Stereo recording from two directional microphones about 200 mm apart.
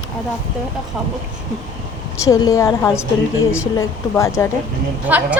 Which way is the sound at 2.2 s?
15° left (ahead or behind).